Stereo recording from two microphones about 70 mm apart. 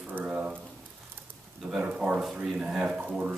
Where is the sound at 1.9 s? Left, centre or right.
Centre.